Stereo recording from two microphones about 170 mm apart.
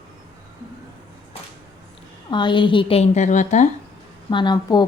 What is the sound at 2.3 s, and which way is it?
A woman's voice, 30° left (ahead or behind).